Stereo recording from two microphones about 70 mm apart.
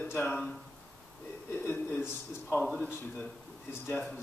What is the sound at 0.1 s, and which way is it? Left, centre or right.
Speech, left.